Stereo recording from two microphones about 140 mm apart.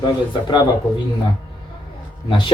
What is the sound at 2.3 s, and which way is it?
Speech, 35° left (ahead or behind).